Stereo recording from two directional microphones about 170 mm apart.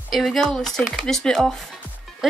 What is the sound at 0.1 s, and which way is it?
Speech, centre (ahead or behind).